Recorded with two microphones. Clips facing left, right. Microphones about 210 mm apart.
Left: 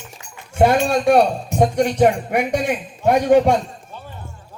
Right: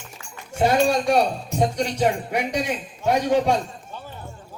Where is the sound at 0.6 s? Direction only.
55° left (ahead or behind).